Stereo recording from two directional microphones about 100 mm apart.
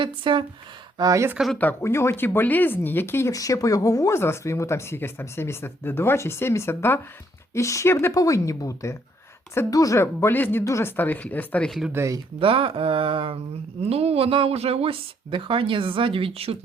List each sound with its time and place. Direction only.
0.0 s a sound: 55° right (ahead or behind)
0.9 s speech: 40° right (ahead or behind)
1.8 s speech: 25° left (ahead or behind)
3.3 s speech: 35° left (ahead or behind); by 11.7 s 15° left (ahead or behind)
11.9 s speech: 25° right (ahead or behind)
12.4 s a sound: 65° right (ahead or behind)
13.8 s speech: 90° right; by 16.6 s 70° right (ahead or behind)